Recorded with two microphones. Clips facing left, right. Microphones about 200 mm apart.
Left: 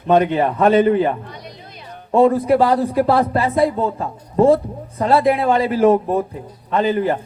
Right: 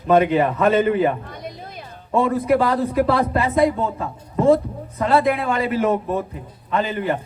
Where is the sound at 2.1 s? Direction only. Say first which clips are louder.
Left 4 dB; 30° left (ahead or behind).